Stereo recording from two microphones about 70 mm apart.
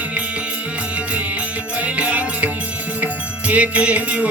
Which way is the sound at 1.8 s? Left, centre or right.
Right.